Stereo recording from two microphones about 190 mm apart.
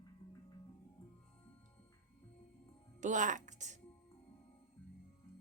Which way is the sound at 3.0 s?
40° right (ahead or behind).